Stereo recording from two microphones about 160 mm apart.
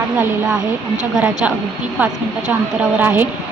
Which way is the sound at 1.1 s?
5° right (ahead or behind).